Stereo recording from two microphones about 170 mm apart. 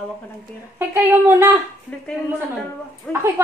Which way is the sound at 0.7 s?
10° right (ahead or behind).